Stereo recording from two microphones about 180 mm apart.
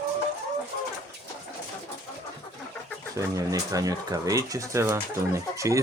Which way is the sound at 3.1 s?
20° right (ahead or behind).